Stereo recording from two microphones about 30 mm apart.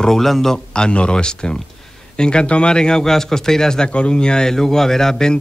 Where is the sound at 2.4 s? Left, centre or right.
Left.